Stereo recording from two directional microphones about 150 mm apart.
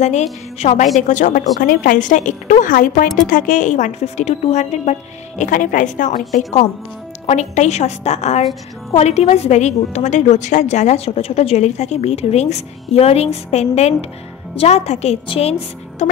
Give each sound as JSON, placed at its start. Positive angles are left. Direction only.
{"t": 0.0, "sound": "a woman's voice", "side_deg": 50}
{"t": 5.4, "sound": "a woman's voice", "side_deg": 60}
{"t": 16.0, "sound": "music", "side_deg": 50}